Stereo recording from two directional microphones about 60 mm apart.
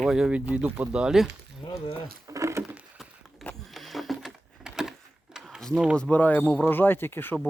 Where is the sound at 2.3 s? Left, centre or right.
Right.